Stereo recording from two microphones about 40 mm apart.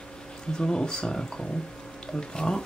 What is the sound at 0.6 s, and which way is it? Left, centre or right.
Speech, centre.